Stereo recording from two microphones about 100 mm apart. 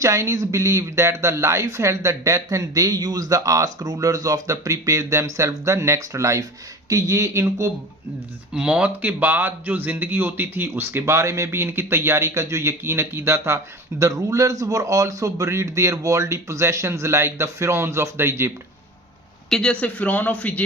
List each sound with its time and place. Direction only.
0.0 s speech: 30° right (ahead or behind)
8.5 s speech: 10° right (ahead or behind)
19.5 s speech: 5° left (ahead or behind)
19.8 s speech: 15° left (ahead or behind)